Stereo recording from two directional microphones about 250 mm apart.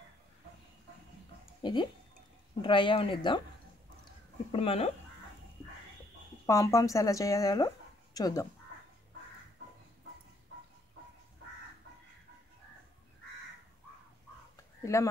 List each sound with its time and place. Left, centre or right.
1.6 s speech: centre
4.0 s a sound: left
6.4 s speech: centre
14.8 s speech: centre